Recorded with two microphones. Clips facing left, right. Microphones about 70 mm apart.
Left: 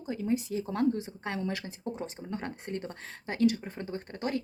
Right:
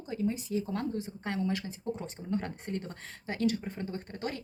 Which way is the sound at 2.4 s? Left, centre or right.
Left.